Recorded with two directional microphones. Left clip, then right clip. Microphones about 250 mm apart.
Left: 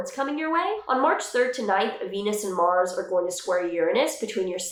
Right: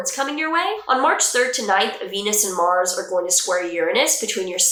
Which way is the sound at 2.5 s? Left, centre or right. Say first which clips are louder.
Right 2 dB; centre.